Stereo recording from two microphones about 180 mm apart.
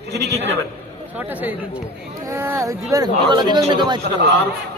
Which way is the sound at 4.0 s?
70° right (ahead or behind).